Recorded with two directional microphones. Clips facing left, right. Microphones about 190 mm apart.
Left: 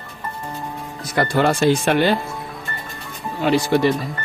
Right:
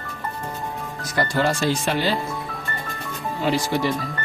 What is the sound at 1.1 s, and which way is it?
Speech, 60° left (ahead or behind).